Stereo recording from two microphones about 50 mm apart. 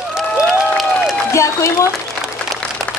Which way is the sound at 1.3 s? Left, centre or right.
Left.